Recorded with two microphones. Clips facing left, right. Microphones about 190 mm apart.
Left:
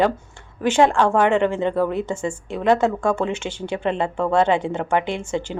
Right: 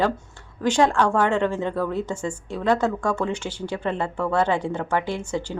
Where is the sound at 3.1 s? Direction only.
25° left (ahead or behind).